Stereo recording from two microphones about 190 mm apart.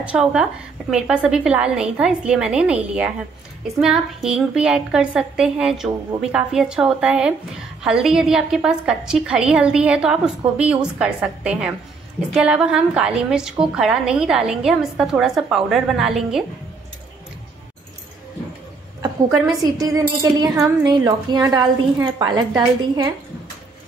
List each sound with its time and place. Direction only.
0.0 s a woman's voice: 5° right (ahead or behind)
19.6 s a woman's voice: 20° right (ahead or behind)